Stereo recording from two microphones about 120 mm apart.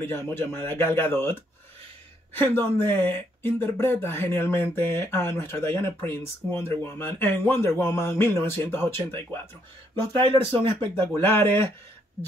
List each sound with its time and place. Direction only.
0.0 s speech: 20° left (ahead or behind)
2.3 s speech: 15° left (ahead or behind)
10.5 s speech: 50° right (ahead or behind)
11.1 s speech: 20° left (ahead or behind)